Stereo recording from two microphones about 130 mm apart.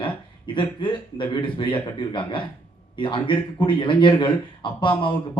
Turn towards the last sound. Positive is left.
turn(degrees=40)  # may be behind; listen again after turning